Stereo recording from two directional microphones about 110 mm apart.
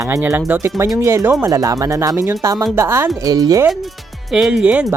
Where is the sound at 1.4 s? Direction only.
35° right (ahead or behind).